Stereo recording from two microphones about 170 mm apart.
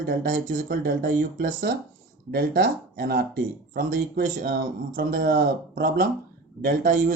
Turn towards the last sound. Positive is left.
turn(degrees=-55)  # may be behind; listen again after turning